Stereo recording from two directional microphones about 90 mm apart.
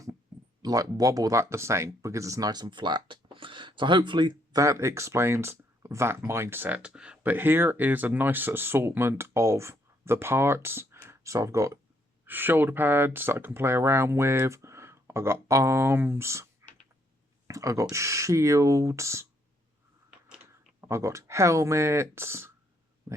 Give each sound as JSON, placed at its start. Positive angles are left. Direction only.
{"t": 0.6, "sound": "speech", "side_deg": -40}
{"t": 3.3, "sound": "speech", "side_deg": -70}
{"t": 4.5, "sound": "speech", "side_deg": -35}
{"t": 7.2, "sound": "speech", "side_deg": -20}
{"t": 12.2, "sound": "speech", "side_deg": -20}
{"t": 17.5, "sound": "speech", "side_deg": -35}
{"t": 20.8, "sound": "speech", "side_deg": -30}